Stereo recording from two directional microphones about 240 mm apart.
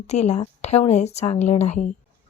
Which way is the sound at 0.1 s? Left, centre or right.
Left.